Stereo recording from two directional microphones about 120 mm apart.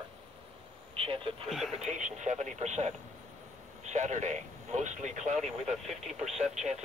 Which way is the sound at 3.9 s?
85° right.